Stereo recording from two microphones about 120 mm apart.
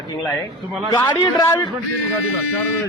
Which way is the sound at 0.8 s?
40° left (ahead or behind).